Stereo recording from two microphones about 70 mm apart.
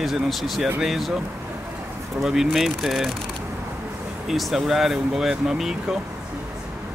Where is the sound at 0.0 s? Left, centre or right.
Centre.